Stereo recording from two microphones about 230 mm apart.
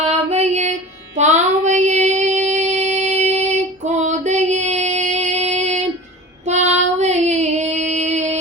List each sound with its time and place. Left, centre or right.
0.3 s female singing: right
1.1 s child singing: right
4.0 s female singing: right
6.4 s child singing: right